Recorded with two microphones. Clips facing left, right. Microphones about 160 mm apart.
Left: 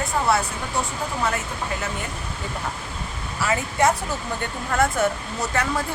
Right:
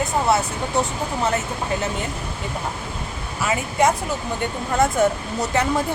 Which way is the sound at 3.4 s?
20° right (ahead or behind).